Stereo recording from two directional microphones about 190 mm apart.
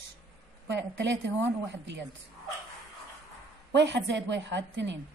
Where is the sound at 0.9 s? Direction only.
70° right (ahead or behind).